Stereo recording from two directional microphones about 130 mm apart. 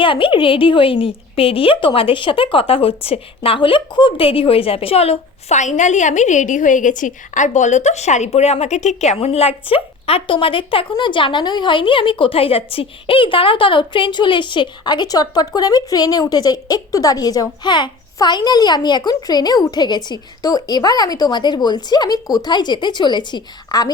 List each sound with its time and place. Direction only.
0.0 s a woman's voice: 40° left (ahead or behind)